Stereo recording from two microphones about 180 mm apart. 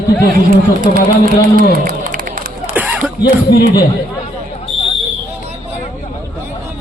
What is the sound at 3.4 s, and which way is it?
Speech, 60° left (ahead or behind).